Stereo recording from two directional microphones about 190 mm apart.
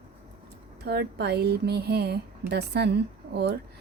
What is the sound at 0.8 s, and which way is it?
A woman's voice, 60° right (ahead or behind).